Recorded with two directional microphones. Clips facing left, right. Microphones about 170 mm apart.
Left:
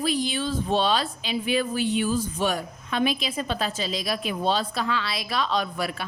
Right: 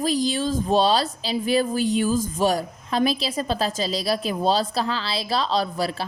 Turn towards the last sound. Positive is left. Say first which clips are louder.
# right 3 dB
turn(degrees=-35)  # may be behind; listen again after turning